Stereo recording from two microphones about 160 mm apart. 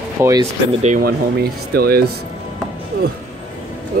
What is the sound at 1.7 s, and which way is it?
Speech, 75° right (ahead or behind).